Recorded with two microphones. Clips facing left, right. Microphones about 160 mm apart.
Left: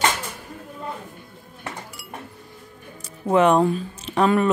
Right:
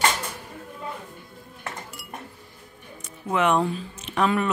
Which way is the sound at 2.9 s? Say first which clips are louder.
Left 7 dB; 35° left (ahead or behind).